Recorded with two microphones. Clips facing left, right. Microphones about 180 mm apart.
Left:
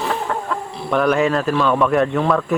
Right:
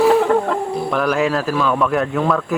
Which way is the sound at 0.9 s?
Centre (ahead or behind).